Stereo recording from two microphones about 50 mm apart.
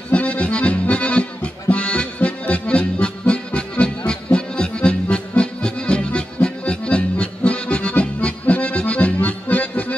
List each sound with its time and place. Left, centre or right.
0.1 s accordion: left